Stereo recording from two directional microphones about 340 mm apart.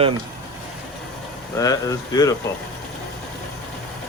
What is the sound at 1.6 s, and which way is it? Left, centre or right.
Speech, centre.